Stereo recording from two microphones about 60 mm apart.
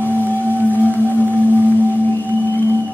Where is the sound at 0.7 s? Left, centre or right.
Left.